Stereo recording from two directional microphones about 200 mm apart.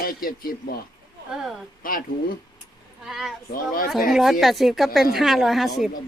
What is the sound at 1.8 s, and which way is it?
Speech, 45° left (ahead or behind).